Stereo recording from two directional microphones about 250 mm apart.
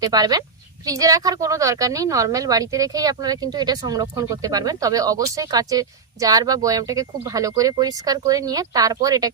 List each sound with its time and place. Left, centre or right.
0.0 s a woman's voice: centre